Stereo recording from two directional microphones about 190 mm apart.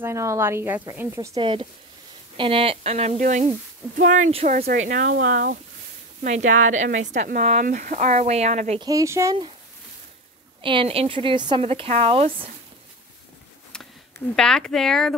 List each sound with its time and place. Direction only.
0.0 s speech: 15° right (ahead or behind)
1.4 s speech: 25° right (ahead or behind)
4.6 s speech: 50° right (ahead or behind)
8.8 s speech: 15° right (ahead or behind)
10.6 s speech: 25° right (ahead or behind)
13.7 s a sound: 5° left (ahead or behind)
14.3 s speech: 5° left (ahead or behind)